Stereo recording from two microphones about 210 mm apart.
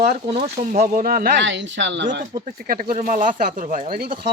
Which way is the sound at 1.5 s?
60° right (ahead or behind).